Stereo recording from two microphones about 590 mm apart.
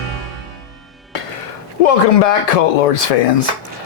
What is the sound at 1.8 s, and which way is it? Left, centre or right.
Speech, left.